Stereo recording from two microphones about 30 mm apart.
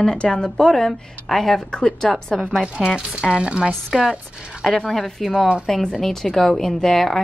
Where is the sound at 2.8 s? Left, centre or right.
Right.